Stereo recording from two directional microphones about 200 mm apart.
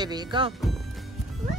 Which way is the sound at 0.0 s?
20° right (ahead or behind).